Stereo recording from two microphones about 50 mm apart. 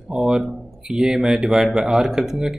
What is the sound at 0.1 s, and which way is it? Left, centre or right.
Speech, centre.